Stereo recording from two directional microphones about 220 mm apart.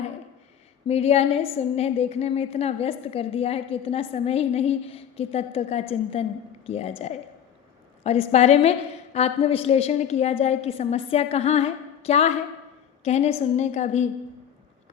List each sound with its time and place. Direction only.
0.9 s a woman's voice: 30° left (ahead or behind)